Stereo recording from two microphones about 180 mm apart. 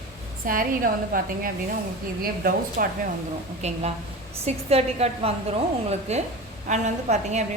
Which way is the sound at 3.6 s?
35° right (ahead or behind).